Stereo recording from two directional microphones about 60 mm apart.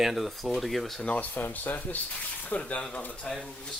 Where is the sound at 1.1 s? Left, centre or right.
Left.